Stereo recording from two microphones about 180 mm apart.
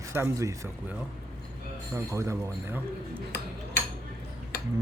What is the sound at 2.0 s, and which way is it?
Speech, 15° right (ahead or behind).